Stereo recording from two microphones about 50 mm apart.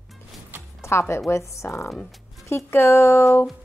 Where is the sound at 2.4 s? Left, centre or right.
Left.